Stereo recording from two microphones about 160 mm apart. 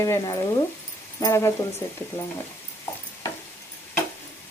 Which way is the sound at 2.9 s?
15° left (ahead or behind).